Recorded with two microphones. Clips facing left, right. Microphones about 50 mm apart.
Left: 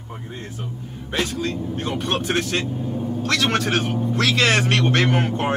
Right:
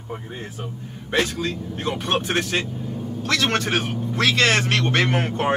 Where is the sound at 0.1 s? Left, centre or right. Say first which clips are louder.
Right 2 dB; centre.